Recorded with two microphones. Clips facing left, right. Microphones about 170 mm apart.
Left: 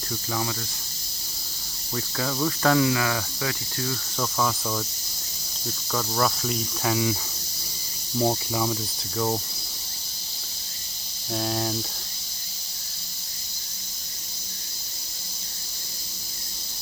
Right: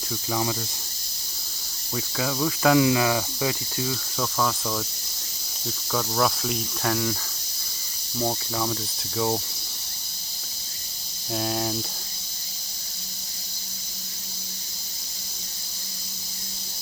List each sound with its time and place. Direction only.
2.0 s cricket: 5° right (ahead or behind)
2.7 s cricket: 20° right (ahead or behind)
4.2 s cricket: centre (ahead or behind)
8.2 s cricket: 10° left (ahead or behind)
11.3 s cricket: centre (ahead or behind)